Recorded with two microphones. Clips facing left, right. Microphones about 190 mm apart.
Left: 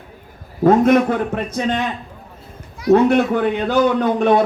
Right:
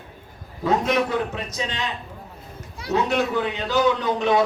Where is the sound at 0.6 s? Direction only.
50° left (ahead or behind).